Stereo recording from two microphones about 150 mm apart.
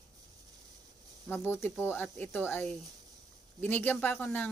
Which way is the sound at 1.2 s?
15° left (ahead or behind).